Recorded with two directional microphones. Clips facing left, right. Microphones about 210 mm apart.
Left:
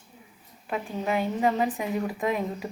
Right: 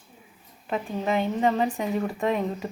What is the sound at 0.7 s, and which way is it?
A woman's voice, 5° left (ahead or behind).